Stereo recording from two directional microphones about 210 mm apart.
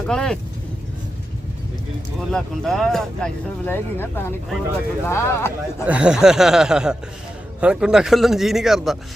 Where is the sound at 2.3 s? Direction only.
Centre (ahead or behind).